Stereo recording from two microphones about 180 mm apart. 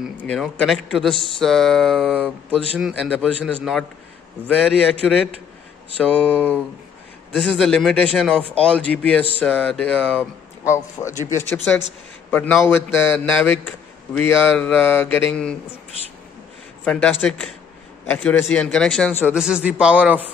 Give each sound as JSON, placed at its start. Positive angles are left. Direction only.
{"t": 0.2, "sound": "speech", "side_deg": 5}
{"t": 5.0, "sound": "speech", "side_deg": 0}
{"t": 6.1, "sound": "mantra", "side_deg": 5}
{"t": 7.3, "sound": "speech", "side_deg": 0}
{"t": 8.5, "sound": "mantra", "side_deg": 5}
{"t": 9.4, "sound": "speech", "side_deg": 0}
{"t": 10.6, "sound": "mantra", "side_deg": 15}
{"t": 16.8, "sound": "mantra", "side_deg": 10}
{"t": 18.0, "sound": "a man's voice", "side_deg": 10}
{"t": 19.3, "sound": "speech", "side_deg": -5}